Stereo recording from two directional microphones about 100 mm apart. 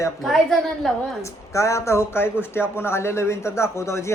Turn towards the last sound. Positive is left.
turn(degrees=30)  # may be behind; listen again after turning